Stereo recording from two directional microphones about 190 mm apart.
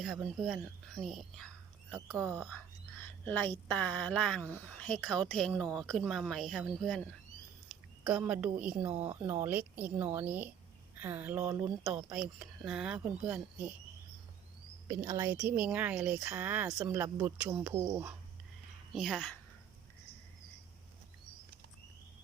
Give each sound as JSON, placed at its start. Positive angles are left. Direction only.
{"t": 0.4, "sound": "speech", "side_deg": 0}
{"t": 1.9, "sound": "speech", "side_deg": -15}
{"t": 3.0, "sound": "speech", "side_deg": 10}
{"t": 8.9, "sound": "speech", "side_deg": -35}
{"t": 9.1, "sound": "speech", "side_deg": -15}
{"t": 14.8, "sound": "speech", "side_deg": -20}
{"t": 18.9, "sound": "speech", "side_deg": 0}